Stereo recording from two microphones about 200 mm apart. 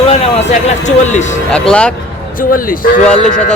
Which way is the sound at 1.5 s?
5° left (ahead or behind).